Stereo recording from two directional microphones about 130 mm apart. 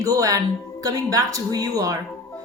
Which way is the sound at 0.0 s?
25° right (ahead or behind).